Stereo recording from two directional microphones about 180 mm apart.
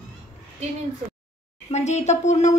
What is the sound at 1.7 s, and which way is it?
Speech, 40° left (ahead or behind).